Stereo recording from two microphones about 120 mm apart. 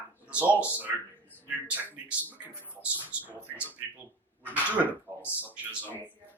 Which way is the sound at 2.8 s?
10° right (ahead or behind).